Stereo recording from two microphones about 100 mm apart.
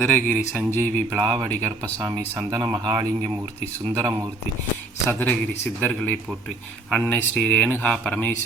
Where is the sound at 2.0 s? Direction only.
35° right (ahead or behind).